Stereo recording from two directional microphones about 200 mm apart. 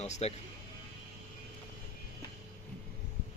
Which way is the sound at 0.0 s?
30° left (ahead or behind).